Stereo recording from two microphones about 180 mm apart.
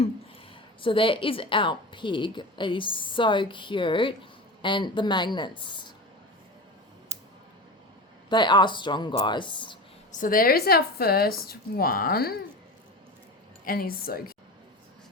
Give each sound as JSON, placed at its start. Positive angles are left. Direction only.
{"t": 0.8, "sound": "a woman's voice", "side_deg": 30}
{"t": 8.3, "sound": "a woman's voice", "side_deg": 25}
{"t": 10.1, "sound": "speech", "side_deg": 50}
{"t": 13.7, "sound": "speech", "side_deg": 55}